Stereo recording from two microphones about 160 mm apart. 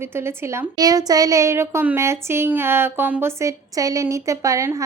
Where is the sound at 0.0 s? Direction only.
15° right (ahead or behind).